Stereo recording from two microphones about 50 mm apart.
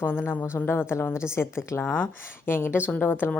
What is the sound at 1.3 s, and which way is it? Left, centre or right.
Speech, left.